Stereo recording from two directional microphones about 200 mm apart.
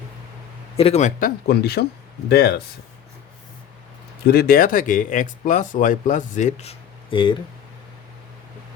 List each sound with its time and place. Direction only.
0.8 s speech: 30° left (ahead or behind)
1.5 s speech: 50° left (ahead or behind)
4.3 s speech: 50° left (ahead or behind); by 7.3 s 25° left (ahead or behind)